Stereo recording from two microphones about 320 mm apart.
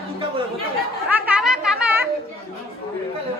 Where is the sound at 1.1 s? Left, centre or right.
Centre.